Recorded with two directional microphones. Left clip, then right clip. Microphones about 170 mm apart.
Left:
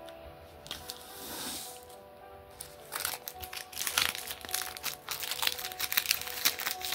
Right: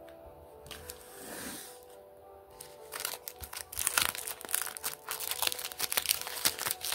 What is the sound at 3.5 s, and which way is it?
Crumpling, 35° right (ahead or behind).